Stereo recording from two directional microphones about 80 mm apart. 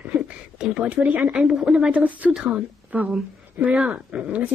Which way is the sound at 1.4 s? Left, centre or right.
Centre.